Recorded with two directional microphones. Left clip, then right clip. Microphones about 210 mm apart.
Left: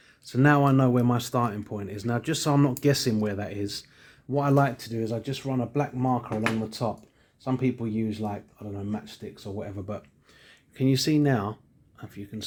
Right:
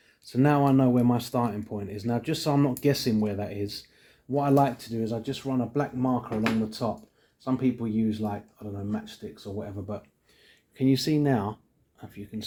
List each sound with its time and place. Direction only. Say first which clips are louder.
0.3 s speech: left 1 dB; 25° left (ahead or behind)